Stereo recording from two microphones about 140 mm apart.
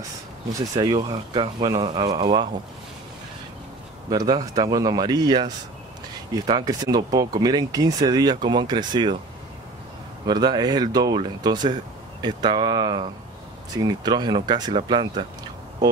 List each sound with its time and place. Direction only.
0.7 s speech: 30° right (ahead or behind)
4.1 s speech: 25° right (ahead or behind)
10.2 s speech: 30° right (ahead or behind)